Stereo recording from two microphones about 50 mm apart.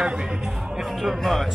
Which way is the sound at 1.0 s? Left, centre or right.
Centre.